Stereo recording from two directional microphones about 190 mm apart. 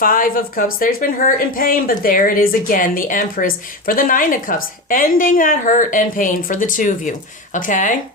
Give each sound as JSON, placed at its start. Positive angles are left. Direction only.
{"t": 0.0, "sound": "speech", "side_deg": 45}